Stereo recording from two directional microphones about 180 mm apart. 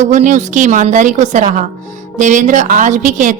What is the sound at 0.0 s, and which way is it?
A woman's voice, 45° right (ahead or behind).